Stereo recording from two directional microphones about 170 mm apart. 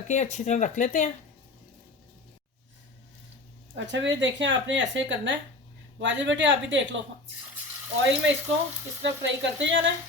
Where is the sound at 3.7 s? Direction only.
90° right.